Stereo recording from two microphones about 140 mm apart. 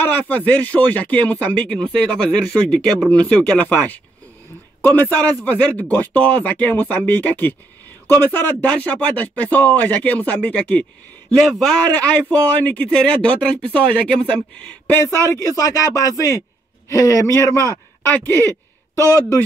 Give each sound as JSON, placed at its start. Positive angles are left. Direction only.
{"t": 0.0, "sound": "speech", "side_deg": 10}
{"t": 5.1, "sound": "speech", "side_deg": 10}
{"t": 15.4, "sound": "speech", "side_deg": 25}
{"t": 19.0, "sound": "speech", "side_deg": 25}